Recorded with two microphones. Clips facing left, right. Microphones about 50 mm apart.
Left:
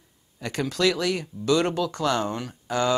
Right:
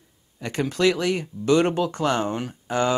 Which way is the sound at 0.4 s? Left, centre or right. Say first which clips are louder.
Right 2 dB; centre.